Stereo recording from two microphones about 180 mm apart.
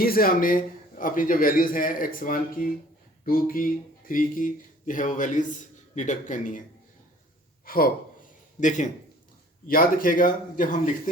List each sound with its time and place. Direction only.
0.0 s a man's voice: 55° left (ahead or behind)
7.6 s gasp: 55° left (ahead or behind)
9.6 s a man's voice: 50° left (ahead or behind)